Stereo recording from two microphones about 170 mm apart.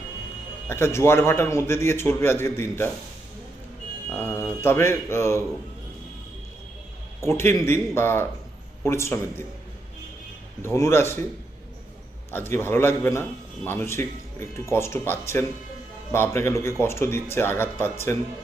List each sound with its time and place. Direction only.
0.7 s a man's voice: 15° left (ahead or behind)
4.1 s a man's voice: 10° left (ahead or behind)
7.2 s a man's voice: 15° left (ahead or behind)
10.6 s a man's voice: 15° left (ahead or behind)
12.3 s a man's voice: 15° left (ahead or behind)